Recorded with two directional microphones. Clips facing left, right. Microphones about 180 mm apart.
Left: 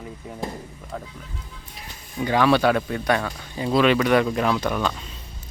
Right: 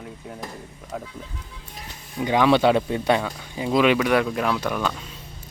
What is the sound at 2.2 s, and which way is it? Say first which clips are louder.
Speech: right 1 dB; 20° right (ahead or behind).